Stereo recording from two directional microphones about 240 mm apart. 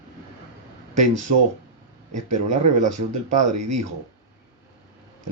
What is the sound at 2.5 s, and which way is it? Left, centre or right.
Speech, right.